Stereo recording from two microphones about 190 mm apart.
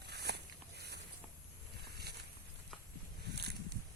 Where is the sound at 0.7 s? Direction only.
60° right (ahead or behind).